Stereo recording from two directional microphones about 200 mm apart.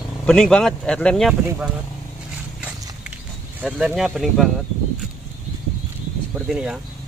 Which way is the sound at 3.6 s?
5° right (ahead or behind).